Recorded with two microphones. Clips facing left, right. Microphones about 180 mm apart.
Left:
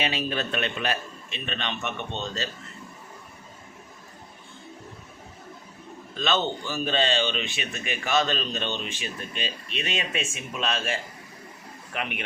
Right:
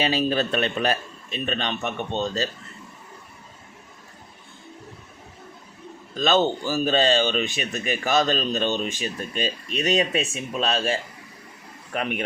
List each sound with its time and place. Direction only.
0.0 s speech: 35° right (ahead or behind)
6.1 s speech: 40° right (ahead or behind)
11.9 s speech: 40° right (ahead or behind)